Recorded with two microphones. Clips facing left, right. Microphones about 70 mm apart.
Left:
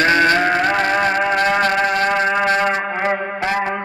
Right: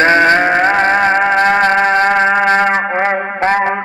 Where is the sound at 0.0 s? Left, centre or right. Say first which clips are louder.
Right 5 dB; right.